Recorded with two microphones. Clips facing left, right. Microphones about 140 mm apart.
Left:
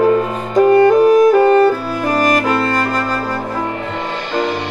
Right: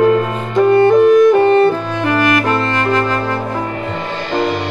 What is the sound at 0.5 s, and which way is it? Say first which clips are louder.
Music: even; 40° left (ahead or behind).